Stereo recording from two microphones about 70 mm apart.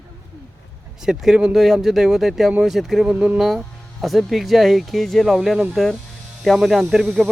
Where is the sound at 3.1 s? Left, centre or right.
Right.